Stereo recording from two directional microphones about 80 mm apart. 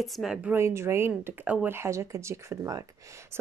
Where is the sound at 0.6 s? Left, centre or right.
Right.